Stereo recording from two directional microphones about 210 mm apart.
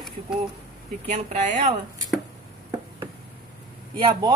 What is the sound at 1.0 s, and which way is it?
Speech, 35° right (ahead or behind).